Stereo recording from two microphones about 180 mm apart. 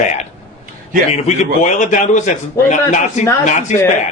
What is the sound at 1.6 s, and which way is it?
Speech, 45° left (ahead or behind).